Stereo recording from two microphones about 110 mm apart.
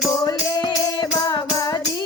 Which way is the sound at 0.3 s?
40° left (ahead or behind).